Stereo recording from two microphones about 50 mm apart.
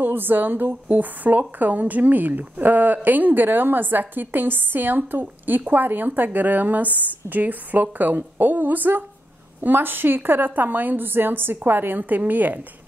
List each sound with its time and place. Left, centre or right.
0.0 s a woman's voice: right